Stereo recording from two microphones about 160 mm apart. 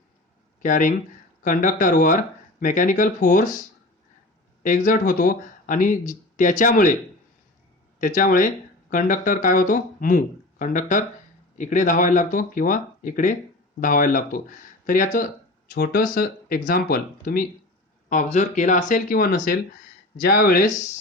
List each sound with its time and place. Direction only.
0.6 s speech: 55° left (ahead or behind)
4.6 s speech: 55° left (ahead or behind)
8.0 s speech: 55° left (ahead or behind)
18.1 s speech: 50° left (ahead or behind)